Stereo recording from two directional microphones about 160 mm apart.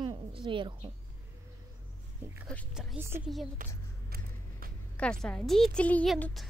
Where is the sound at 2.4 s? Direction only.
10° left (ahead or behind).